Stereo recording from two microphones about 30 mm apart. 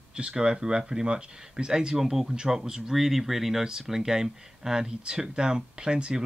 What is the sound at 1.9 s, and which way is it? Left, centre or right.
Speech, centre.